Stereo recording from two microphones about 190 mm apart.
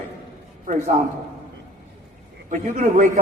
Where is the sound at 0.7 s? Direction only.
45° right (ahead or behind).